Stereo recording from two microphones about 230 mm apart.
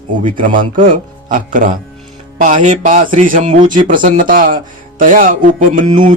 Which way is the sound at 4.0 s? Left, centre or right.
Right.